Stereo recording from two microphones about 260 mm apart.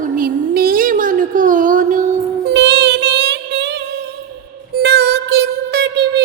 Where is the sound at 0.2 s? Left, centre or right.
Right.